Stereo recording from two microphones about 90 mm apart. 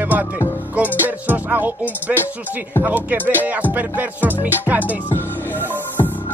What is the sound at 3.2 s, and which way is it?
Music, 20° left (ahead or behind).